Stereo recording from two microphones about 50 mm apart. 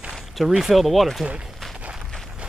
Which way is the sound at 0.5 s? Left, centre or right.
Centre.